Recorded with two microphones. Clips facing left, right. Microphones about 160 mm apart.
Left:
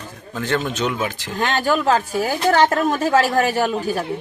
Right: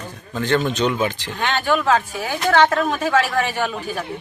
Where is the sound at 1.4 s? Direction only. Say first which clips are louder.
Left 1 dB; 40° left (ahead or behind).